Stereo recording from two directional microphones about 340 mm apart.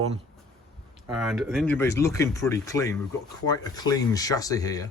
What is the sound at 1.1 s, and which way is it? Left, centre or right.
Speech, centre.